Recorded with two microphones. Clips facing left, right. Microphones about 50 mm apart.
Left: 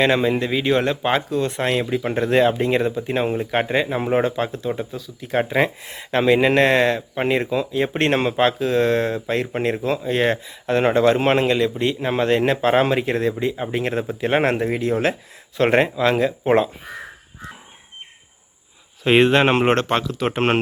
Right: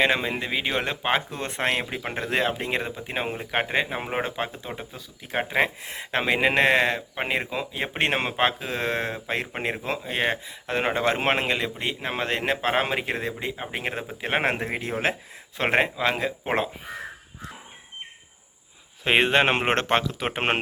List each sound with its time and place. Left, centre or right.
0.0 s speech: centre
1.3 s speech: right
2.0 s speech: centre
11.0 s speech: right
19.0 s speech: centre
19.7 s speech: right
20.1 s speech: centre